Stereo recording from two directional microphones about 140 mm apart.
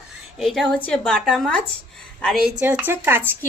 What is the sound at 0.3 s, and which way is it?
A woman's voice, centre (ahead or behind).